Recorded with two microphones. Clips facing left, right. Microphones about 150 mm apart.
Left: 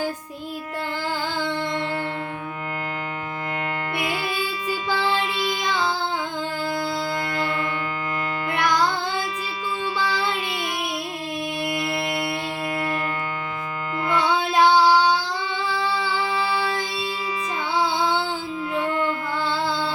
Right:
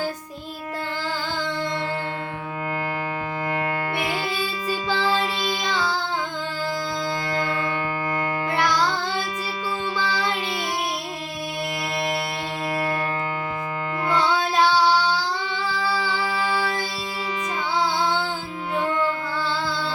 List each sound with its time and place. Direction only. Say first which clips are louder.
3.9 s music: even; 35° right (ahead or behind)
12.7 s music: right 2 dB; 35° right (ahead or behind)
14.3 s child singing: left 6 dB; 10° left (ahead or behind)
17.7 s music: left 1 dB; 10° left (ahead or behind)